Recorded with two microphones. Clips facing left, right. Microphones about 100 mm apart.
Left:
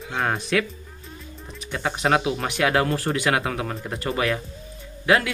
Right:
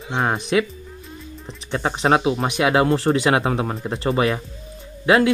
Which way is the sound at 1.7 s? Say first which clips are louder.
Right 3 dB; 30° right (ahead or behind).